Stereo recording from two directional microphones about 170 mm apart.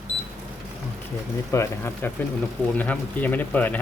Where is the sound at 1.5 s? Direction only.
15° left (ahead or behind).